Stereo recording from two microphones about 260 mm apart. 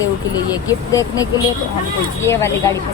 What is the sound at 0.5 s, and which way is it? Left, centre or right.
Speech, centre.